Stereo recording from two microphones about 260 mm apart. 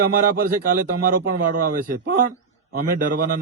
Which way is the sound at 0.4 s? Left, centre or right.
Right.